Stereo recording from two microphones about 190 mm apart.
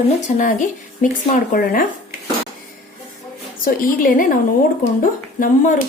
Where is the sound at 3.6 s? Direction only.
45° left (ahead or behind).